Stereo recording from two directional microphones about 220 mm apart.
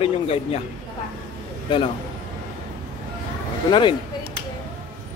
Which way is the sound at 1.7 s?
25° left (ahead or behind).